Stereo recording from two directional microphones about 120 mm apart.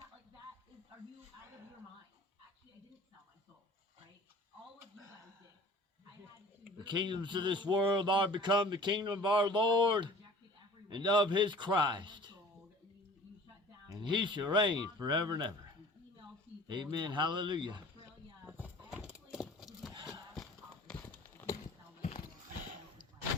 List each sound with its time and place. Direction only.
6.7 s speech: 40° right (ahead or behind)
13.8 s speech: 35° right (ahead or behind)
16.6 s speech: 40° right (ahead or behind)
18.4 s a sound: 10° right (ahead or behind); by 21.2 s 10° left (ahead or behind)